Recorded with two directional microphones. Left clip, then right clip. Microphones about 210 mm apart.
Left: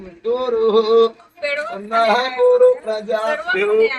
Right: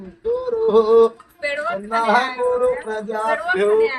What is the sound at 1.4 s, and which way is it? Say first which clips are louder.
Speech: left 3 dB; 40° right (ahead or behind).